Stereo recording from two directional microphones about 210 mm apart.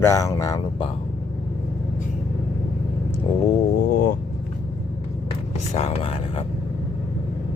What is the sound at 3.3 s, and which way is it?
Speech, 25° left (ahead or behind).